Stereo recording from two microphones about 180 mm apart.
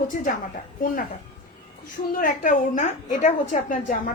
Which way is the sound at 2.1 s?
50° left (ahead or behind).